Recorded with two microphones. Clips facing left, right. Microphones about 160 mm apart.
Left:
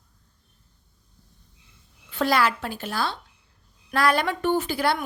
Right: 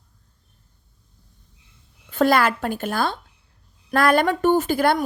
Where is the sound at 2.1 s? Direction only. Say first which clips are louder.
Right 4 dB; 50° right (ahead or behind).